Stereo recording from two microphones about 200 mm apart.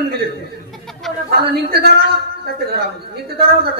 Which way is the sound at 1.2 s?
55° right (ahead or behind).